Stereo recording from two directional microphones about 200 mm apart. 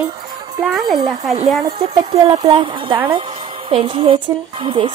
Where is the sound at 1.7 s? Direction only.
20° right (ahead or behind).